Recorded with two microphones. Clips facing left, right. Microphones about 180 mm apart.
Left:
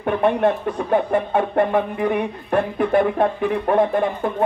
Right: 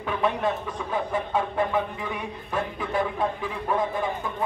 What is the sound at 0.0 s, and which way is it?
Speech, 60° left (ahead or behind).